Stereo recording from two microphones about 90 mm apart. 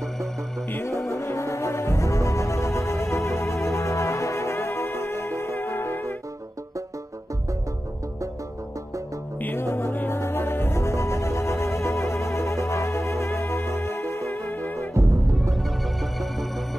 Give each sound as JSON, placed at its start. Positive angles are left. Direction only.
{"t": 0.7, "sound": "music", "side_deg": 25}
{"t": 9.4, "sound": "music", "side_deg": 25}
{"t": 15.5, "sound": "music", "side_deg": 0}